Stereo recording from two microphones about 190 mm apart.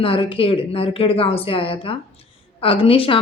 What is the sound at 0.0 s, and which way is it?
A woman's voice, 30° left (ahead or behind).